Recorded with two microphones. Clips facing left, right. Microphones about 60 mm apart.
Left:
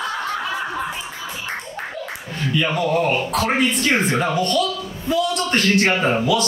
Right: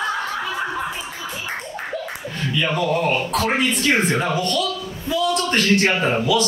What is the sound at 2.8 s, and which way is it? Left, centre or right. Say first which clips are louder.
Speech: left 1 dB; left.